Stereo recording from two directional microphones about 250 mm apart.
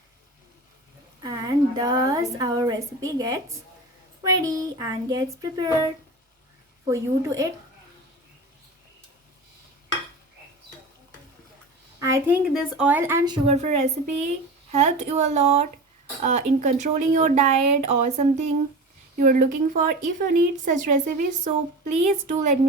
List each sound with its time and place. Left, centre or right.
1.2 s a woman's voice: centre
4.4 s a child's voice: centre
11.9 s a woman's voice: centre